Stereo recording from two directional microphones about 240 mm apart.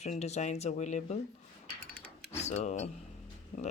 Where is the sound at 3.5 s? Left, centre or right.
Left.